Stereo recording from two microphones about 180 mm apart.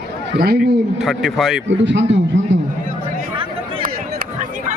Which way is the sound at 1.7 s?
90° right.